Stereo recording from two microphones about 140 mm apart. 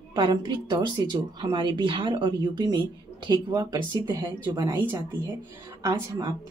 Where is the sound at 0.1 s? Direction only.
30° right (ahead or behind).